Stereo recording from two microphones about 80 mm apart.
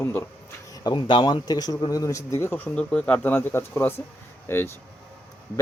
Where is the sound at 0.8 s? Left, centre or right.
Left.